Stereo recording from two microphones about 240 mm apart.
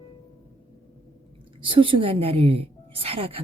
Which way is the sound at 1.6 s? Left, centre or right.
Right.